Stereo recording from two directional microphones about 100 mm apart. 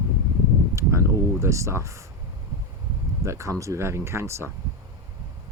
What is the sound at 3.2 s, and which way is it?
Speech, 30° right (ahead or behind).